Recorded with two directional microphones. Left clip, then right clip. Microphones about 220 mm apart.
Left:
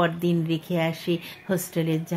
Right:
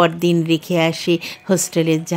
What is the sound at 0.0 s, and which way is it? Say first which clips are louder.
A woman's voice: right 8 dB; 45° right (ahead or behind).